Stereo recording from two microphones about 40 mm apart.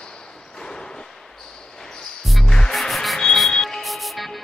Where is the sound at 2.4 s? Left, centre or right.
Centre.